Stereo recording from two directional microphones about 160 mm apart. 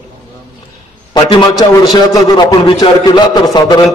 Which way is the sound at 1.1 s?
30° left (ahead or behind).